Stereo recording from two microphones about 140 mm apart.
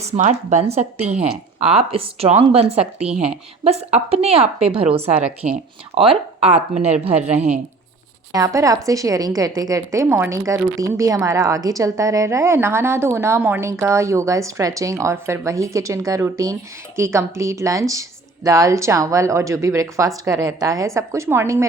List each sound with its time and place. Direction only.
0.3 s speech: 55° right (ahead or behind)
8.3 s a woman's voice: 25° right (ahead or behind)